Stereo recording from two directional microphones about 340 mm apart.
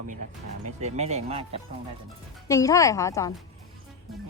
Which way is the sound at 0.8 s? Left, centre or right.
Centre.